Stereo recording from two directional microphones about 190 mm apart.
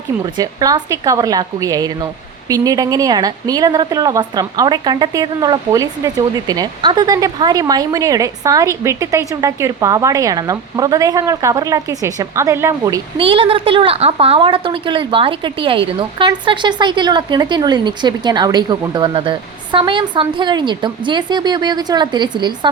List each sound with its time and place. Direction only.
0.3 s a woman's voice: 20° right (ahead or behind)
13.2 s a woman's voice: 30° right (ahead or behind)